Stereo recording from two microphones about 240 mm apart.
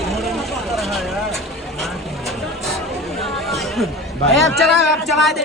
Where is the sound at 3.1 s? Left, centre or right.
Centre.